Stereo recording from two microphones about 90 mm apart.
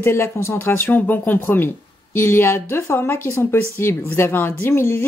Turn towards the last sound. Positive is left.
turn(degrees=30)  # may be behind; listen again after turning